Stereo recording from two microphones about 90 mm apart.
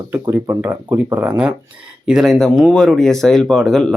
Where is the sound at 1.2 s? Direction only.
15° right (ahead or behind).